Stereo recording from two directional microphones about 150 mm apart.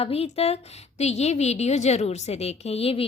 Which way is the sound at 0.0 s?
40° left (ahead or behind).